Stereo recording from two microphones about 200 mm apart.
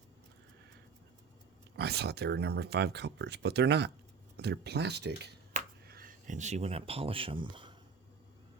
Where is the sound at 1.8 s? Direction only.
55° right (ahead or behind).